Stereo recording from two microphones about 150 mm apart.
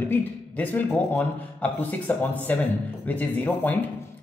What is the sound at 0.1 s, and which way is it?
A man's voice, 10° left (ahead or behind).